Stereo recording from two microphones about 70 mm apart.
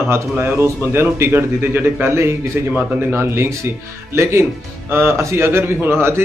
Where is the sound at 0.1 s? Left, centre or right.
Right.